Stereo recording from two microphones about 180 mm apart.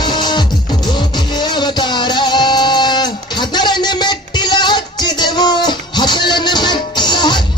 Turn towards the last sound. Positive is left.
turn(degrees=25)  # may be behind; listen again after turning